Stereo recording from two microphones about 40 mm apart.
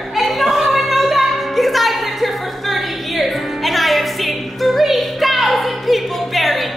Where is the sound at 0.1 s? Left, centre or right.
Centre.